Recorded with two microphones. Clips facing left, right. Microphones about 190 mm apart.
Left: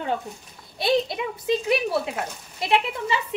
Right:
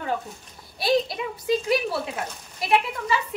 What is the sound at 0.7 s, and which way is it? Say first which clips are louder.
Speech: even; 20° left (ahead or behind).